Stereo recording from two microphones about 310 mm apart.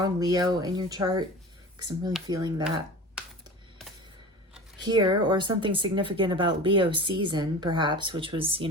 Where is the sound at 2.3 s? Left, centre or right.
Centre.